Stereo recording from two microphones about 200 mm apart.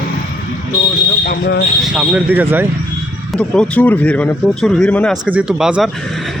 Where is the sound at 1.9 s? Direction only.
5° right (ahead or behind).